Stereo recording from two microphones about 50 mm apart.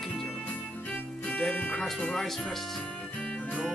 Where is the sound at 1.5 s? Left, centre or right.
Left.